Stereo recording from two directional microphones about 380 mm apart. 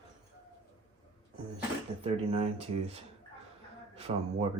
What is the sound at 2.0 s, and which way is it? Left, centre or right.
Speech, centre.